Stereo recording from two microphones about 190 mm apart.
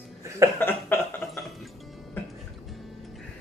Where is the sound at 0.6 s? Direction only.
10° left (ahead or behind).